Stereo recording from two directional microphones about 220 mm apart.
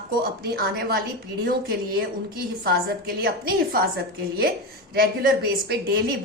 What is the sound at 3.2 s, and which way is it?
Speech, 45° right (ahead or behind).